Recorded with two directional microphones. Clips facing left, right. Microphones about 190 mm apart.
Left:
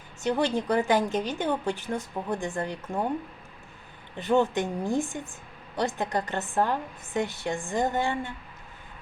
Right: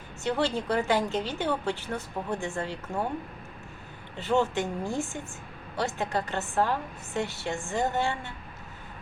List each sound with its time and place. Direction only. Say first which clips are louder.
0.2 s a woman's voice: left 2 dB; 15° left (ahead or behind)
4.2 s a woman's voice: left 2 dB; 15° left (ahead or behind)